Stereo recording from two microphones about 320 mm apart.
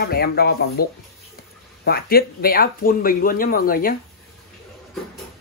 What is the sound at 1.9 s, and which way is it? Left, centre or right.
Speech, left.